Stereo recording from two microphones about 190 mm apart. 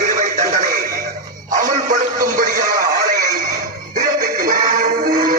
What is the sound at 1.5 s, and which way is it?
Music, 45° right (ahead or behind).